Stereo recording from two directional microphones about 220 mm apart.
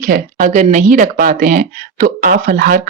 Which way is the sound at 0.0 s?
40° right (ahead or behind).